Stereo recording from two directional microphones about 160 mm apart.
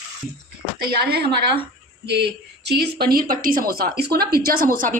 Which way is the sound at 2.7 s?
85° right.